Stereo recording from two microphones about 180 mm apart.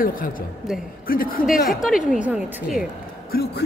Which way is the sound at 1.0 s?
55° left (ahead or behind).